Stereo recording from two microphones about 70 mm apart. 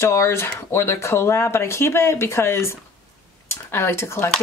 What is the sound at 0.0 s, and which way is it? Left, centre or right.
Speech, left.